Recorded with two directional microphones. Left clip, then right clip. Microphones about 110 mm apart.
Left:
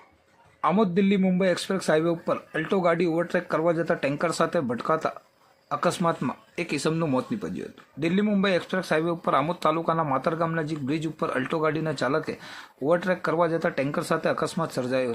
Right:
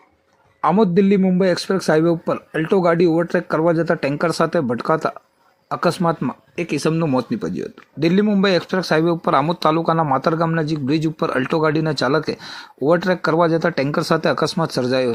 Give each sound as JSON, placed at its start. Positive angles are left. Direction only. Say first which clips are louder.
{"t": 0.6, "sound": "speech", "louder": "right 7 dB", "side_deg": -20}
{"t": 6.2, "sound": "speech", "louder": "right 5 dB", "side_deg": -5}
{"t": 7.2, "sound": "speech", "louder": "right 7 dB", "side_deg": -25}